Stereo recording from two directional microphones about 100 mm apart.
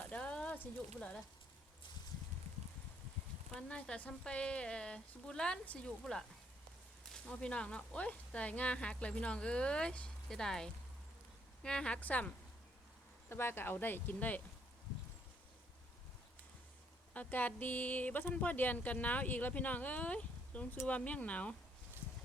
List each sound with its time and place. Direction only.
0.0 s a sound: 10° left (ahead or behind)
0.9 s speech: 10° left (ahead or behind)
3.5 s speech: 10° left (ahead or behind)
17.2 s speech: 15° left (ahead or behind)